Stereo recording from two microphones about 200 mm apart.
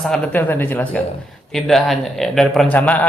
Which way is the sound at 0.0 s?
5° left (ahead or behind).